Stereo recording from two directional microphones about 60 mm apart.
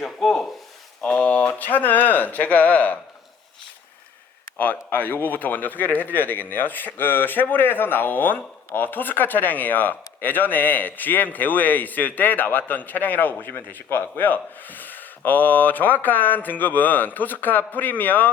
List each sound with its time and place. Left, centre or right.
0.0 s a sound: centre
1.0 s speech: left
4.5 s speech: left